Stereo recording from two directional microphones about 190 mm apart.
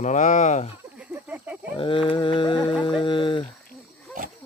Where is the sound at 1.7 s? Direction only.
25° left (ahead or behind).